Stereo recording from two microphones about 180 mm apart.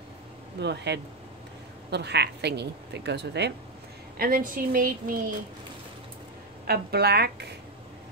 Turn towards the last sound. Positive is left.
turn(degrees=-65)  # may be behind; listen again after turning